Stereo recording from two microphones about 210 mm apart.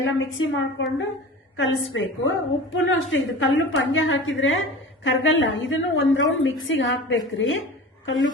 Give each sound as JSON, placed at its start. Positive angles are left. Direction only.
{"t": 0.0, "sound": "a woman's voice", "side_deg": 65}